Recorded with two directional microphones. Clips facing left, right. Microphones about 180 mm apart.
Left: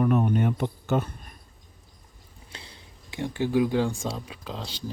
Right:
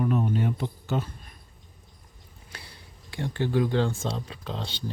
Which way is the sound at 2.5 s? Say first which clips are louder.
Left 1 dB; 20° left (ahead or behind).